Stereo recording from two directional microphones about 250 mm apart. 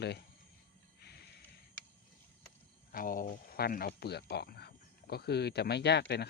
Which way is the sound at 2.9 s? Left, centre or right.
Left.